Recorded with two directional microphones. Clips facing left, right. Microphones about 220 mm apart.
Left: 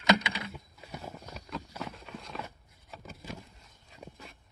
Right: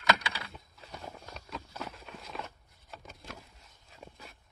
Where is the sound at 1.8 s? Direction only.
Centre (ahead or behind).